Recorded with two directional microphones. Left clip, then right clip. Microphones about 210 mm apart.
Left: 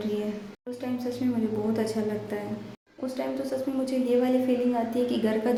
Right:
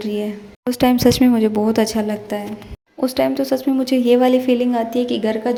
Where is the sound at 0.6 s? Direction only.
45° right (ahead or behind).